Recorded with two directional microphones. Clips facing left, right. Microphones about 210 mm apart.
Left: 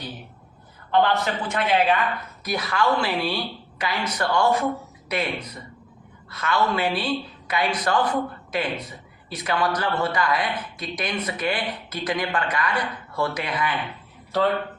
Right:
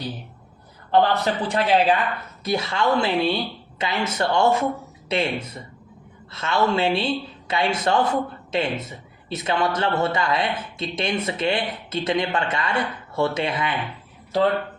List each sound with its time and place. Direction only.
0.9 s a man's voice: 35° right (ahead or behind)